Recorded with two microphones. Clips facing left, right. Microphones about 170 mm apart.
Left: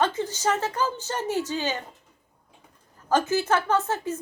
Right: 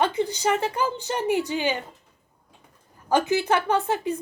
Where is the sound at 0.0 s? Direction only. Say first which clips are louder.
Right 2 dB; 15° right (ahead or behind).